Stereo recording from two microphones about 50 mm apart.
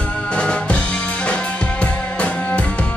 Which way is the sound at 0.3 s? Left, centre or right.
Left.